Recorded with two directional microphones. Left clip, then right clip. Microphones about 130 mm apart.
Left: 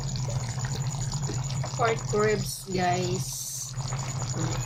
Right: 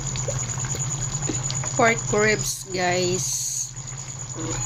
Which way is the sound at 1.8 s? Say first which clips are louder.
Right 7 dB; 80° right.